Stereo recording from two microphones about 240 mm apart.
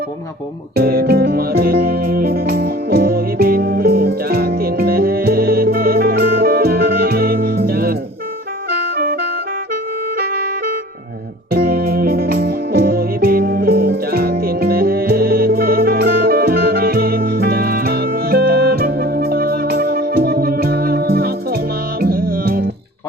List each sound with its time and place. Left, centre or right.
0.8 s music: right
11.5 s music: right